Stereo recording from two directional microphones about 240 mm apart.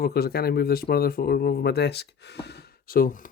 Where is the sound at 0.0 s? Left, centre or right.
Left.